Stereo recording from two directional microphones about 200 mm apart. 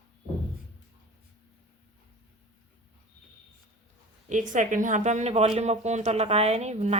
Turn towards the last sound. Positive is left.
turn(degrees=-35)  # may be behind; listen again after turning